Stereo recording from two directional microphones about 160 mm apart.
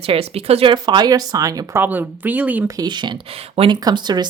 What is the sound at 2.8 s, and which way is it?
Speech, 30° right (ahead or behind).